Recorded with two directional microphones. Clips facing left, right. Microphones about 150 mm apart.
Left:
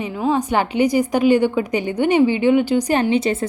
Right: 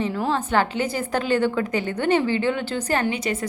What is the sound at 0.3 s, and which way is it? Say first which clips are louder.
A woman's voice: left 6 dB; 15° left (ahead or behind).